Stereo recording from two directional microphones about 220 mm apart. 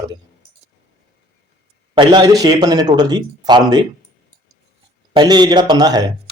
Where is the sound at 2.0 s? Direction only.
20° right (ahead or behind).